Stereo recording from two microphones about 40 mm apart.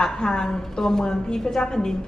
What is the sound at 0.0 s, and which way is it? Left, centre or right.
A man's voice, centre.